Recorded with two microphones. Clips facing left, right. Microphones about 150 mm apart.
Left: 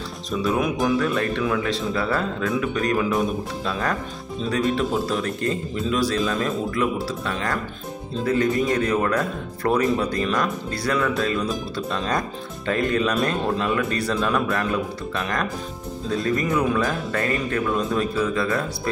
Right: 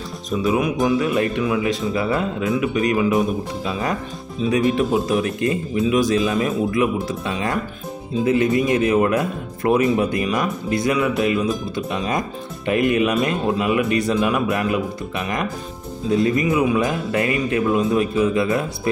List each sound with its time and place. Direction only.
0.4 s speech: 5° right (ahead or behind)
4.5 s speech: 20° right (ahead or behind)